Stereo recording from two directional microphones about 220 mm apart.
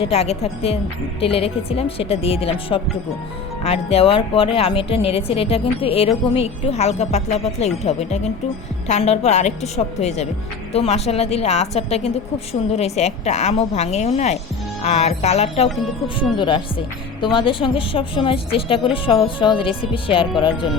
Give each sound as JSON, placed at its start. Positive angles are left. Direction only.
{"t": 0.0, "sound": "a woman's voice", "side_deg": 25}